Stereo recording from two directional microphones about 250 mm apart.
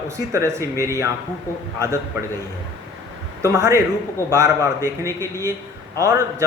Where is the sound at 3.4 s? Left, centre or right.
Centre.